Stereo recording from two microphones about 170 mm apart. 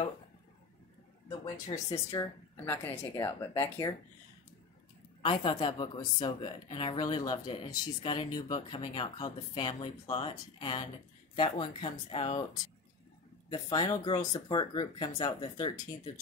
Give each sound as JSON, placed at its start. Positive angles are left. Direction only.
{"t": 1.4, "sound": "speech", "side_deg": 20}
{"t": 5.2, "sound": "speech", "side_deg": 30}
{"t": 13.5, "sound": "speech", "side_deg": 20}